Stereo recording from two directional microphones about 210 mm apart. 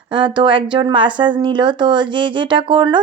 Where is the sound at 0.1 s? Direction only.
25° right (ahead or behind).